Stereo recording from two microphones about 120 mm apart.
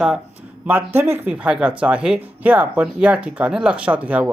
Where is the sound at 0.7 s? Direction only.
20° right (ahead or behind).